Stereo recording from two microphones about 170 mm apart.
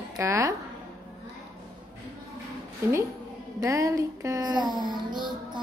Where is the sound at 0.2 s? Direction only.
15° right (ahead or behind).